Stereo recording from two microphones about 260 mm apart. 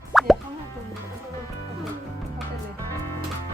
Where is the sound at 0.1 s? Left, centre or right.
Centre.